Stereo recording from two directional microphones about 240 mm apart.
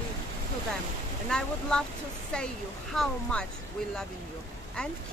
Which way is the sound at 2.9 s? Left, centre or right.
Centre.